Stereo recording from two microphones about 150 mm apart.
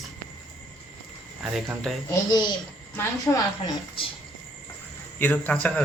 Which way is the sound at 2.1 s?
30° left (ahead or behind).